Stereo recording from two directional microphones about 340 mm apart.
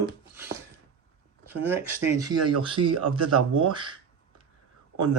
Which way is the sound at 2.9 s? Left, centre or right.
Right.